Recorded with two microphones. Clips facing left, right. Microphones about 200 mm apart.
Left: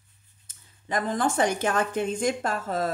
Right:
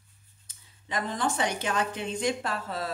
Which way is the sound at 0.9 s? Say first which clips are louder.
Left 4 dB; 50° left (ahead or behind).